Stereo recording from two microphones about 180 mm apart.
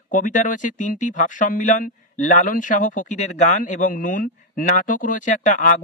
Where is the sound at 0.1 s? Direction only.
45° left (ahead or behind).